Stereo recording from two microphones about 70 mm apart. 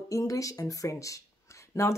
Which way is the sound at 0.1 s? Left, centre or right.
Left.